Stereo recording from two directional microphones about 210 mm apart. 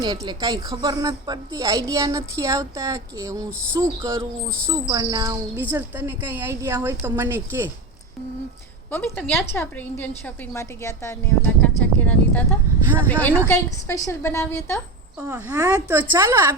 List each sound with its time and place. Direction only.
0.0 s a woman's voice: 20° right (ahead or behind)
8.9 s speech: 10° left (ahead or behind)
15.2 s a woman's voice: 15° right (ahead or behind)